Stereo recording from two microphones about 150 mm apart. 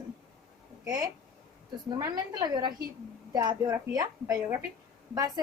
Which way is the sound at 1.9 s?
25° right (ahead or behind).